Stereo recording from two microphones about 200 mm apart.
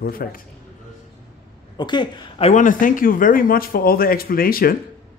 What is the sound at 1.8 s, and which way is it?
Speech, 20° left (ahead or behind).